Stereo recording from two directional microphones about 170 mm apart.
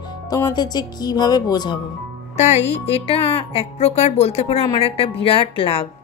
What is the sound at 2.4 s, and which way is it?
Speech, 40° left (ahead or behind).